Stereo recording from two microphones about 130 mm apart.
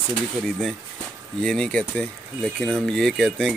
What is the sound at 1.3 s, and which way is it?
Speech, 5° left (ahead or behind).